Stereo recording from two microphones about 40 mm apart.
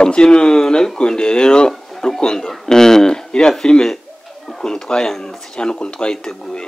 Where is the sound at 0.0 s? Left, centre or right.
Left.